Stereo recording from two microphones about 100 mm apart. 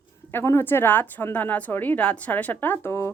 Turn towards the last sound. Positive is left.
turn(degrees=25)  # may be behind; listen again after turning